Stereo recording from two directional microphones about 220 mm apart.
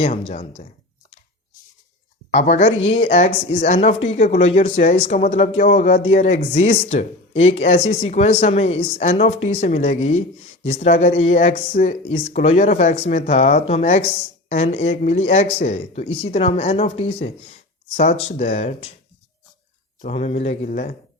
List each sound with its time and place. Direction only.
0.0 s speech: 30° left (ahead or behind)
2.3 s speech: 30° left (ahead or behind)
20.0 s speech: 30° left (ahead or behind)